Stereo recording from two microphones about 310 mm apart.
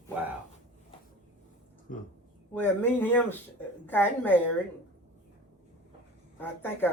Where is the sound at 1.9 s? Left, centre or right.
Left.